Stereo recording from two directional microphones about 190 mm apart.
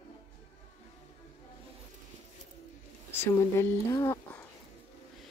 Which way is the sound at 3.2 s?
15° left (ahead or behind).